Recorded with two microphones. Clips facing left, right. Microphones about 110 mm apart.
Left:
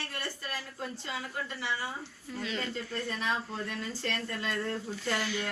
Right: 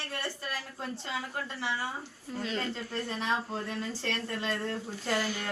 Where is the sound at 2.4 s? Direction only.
40° right (ahead or behind).